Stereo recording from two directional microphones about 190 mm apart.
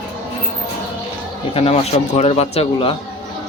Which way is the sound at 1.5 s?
30° left (ahead or behind).